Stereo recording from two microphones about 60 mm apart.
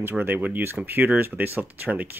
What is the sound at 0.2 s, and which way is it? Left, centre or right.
Speech, right.